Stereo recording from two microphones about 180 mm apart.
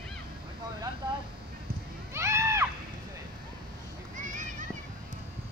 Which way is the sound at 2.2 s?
15° right (ahead or behind).